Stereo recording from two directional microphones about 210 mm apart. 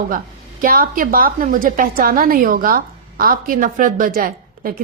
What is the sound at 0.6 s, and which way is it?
A woman's voice, 45° right (ahead or behind).